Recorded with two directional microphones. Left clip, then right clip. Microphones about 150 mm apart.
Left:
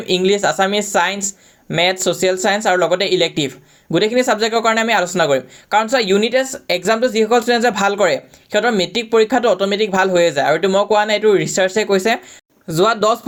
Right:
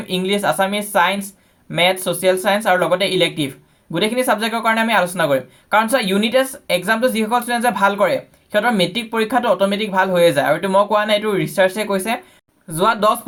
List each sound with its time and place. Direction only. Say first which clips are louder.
0.0 s speech: left 4 dB; 25° left (ahead or behind)